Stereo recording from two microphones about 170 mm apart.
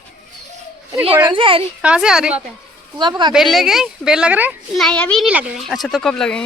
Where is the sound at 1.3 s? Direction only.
30° right (ahead or behind).